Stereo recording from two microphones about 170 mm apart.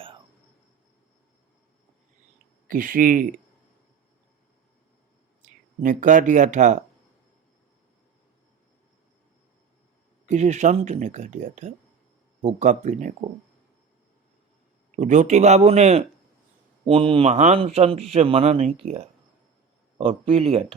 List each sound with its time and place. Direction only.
2.6 s speech: 55° right (ahead or behind)
5.8 s speech: 50° right (ahead or behind)
10.2 s speech: 45° right (ahead or behind)
14.9 s speech: 45° right (ahead or behind)
20.0 s speech: 35° right (ahead or behind)